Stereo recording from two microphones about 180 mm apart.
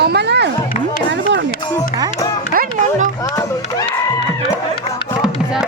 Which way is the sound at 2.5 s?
50° right (ahead or behind).